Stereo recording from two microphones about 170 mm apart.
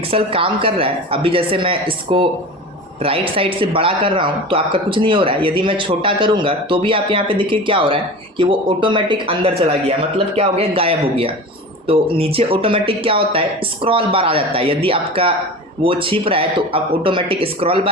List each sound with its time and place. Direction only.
0.1 s speech: 30° right (ahead or behind)